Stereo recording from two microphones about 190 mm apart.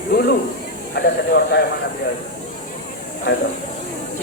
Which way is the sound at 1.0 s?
55° left (ahead or behind).